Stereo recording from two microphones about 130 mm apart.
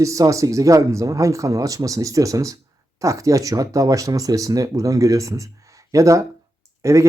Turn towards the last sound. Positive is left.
turn(degrees=-25)  # may be behind; listen again after turning